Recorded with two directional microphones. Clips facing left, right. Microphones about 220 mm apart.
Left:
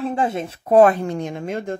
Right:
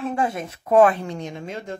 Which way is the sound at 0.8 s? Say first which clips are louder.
Left 3 dB; 45° left (ahead or behind).